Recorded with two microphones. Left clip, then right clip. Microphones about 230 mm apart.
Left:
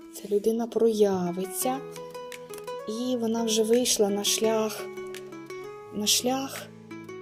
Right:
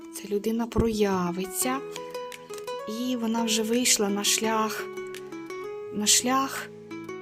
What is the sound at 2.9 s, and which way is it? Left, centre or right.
Speech, right.